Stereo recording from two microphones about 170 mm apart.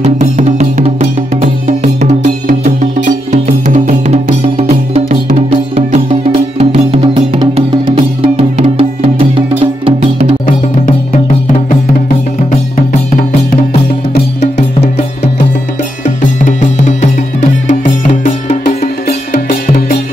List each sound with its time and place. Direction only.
0.0 s music: 45° right (ahead or behind)
16.2 s music: 45° left (ahead or behind)
19.0 s music: 60° left (ahead or behind)